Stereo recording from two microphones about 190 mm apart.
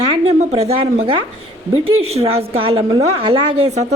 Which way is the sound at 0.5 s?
30° right (ahead or behind).